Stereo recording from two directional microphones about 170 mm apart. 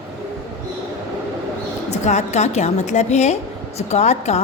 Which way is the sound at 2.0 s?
40° left (ahead or behind).